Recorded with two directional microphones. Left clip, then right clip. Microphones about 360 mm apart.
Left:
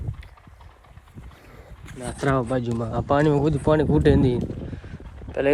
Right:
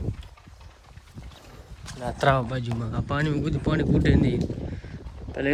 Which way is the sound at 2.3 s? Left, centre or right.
Centre.